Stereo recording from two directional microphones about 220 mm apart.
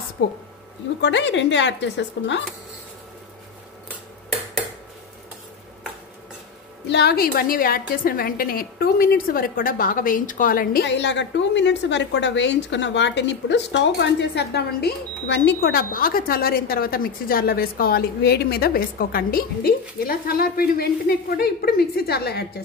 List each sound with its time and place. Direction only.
0.2 s a woman's voice: 50° left (ahead or behind)
6.9 s a woman's voice: 45° left (ahead or behind)